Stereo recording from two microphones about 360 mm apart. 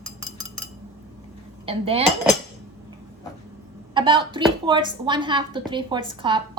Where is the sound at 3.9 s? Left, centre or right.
Centre.